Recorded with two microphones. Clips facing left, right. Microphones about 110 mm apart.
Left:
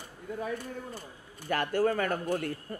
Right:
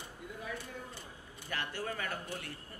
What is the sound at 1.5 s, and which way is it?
Speech, 50° left (ahead or behind).